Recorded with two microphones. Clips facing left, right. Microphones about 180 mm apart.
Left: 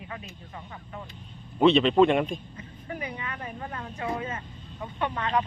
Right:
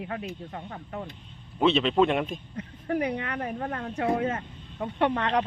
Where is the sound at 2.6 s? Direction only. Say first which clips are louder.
Right 8 dB; 70° right (ahead or behind).